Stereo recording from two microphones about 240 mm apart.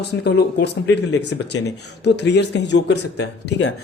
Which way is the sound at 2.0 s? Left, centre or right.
Left.